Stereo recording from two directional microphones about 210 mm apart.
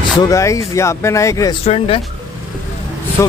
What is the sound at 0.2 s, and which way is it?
Speech, 15° left (ahead or behind).